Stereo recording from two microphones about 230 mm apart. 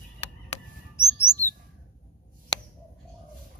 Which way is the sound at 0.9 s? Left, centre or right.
Centre.